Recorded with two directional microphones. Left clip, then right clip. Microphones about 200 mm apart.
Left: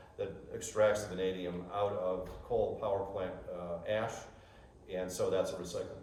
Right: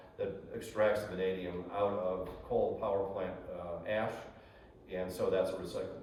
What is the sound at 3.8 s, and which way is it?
Speech, 50° left (ahead or behind).